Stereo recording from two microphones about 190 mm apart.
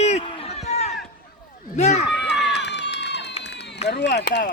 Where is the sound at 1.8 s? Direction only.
35° left (ahead or behind).